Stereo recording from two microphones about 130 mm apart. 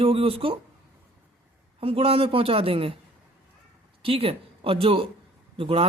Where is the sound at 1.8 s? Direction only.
45° right (ahead or behind).